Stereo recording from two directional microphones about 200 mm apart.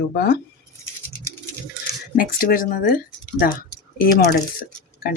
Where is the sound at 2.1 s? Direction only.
45° left (ahead or behind).